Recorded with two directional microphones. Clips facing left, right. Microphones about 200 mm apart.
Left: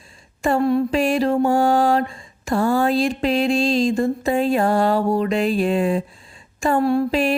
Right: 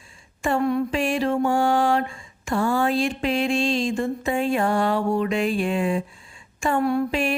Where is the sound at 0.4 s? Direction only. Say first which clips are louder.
Left 4 dB; 35° left (ahead or behind).